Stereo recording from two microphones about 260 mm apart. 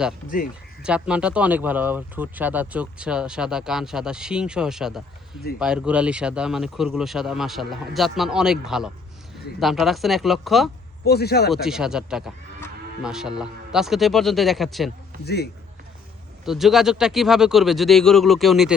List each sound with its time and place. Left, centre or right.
0.8 s speech: centre
11.0 s speech: left
11.5 s speech: centre
15.2 s speech: left
16.5 s speech: centre